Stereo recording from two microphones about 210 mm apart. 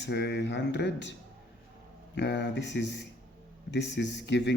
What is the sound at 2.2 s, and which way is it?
Speech, 55° left (ahead or behind).